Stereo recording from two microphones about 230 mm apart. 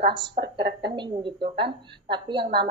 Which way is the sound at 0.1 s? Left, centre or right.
Centre.